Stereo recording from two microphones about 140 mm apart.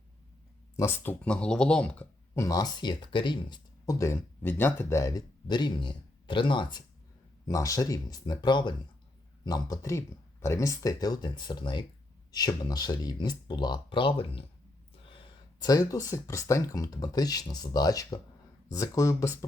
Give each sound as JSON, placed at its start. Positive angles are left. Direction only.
{"t": 0.8, "sound": "speech", "side_deg": 15}
{"t": 2.3, "sound": "speech", "side_deg": 25}
{"t": 3.8, "sound": "speech", "side_deg": 20}
{"t": 15.6, "sound": "speech", "side_deg": 25}